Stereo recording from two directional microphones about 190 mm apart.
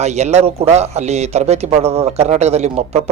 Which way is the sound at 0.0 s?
35° right (ahead or behind).